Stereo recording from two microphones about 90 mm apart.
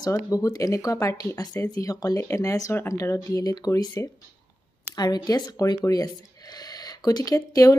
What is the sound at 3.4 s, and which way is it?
Speech, 45° left (ahead or behind).